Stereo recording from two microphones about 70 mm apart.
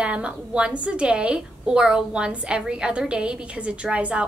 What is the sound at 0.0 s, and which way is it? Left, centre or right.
A woman's voice, centre.